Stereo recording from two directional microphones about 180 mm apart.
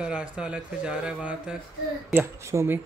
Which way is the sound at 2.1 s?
15° right (ahead or behind).